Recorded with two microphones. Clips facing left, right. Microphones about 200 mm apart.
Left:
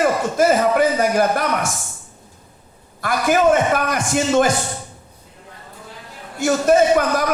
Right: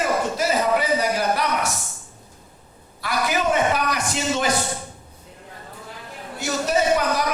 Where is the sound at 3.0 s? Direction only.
50° left (ahead or behind).